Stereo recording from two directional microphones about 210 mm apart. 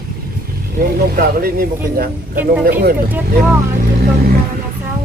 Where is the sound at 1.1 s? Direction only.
45° right (ahead or behind).